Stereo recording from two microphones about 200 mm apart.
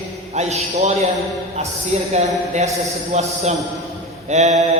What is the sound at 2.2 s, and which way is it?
Speech, 35° right (ahead or behind).